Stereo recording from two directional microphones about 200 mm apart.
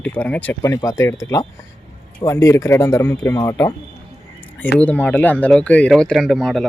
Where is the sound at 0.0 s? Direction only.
5° left (ahead or behind).